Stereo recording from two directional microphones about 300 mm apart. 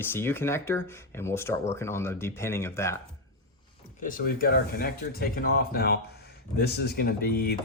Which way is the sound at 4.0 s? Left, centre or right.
Left.